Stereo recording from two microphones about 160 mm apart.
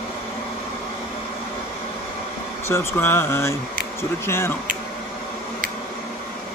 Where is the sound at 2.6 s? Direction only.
15° left (ahead or behind).